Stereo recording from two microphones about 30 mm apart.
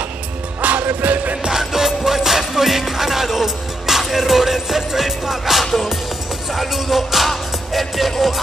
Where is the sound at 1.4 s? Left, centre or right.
Centre.